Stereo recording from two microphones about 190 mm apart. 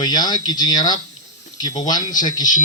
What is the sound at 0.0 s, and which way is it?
Speech, 20° left (ahead or behind).